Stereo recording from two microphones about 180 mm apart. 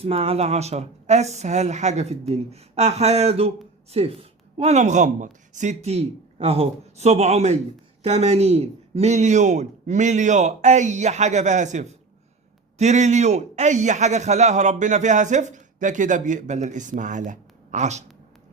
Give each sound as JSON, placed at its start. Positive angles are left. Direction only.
{"t": 0.0, "sound": "a man's voice", "side_deg": -35}